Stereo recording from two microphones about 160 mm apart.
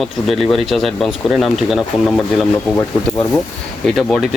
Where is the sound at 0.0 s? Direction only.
Centre (ahead or behind).